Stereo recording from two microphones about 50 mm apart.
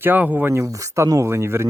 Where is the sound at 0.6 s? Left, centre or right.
Right.